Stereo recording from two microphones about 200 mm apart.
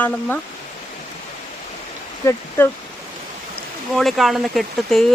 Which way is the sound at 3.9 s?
Centre (ahead or behind).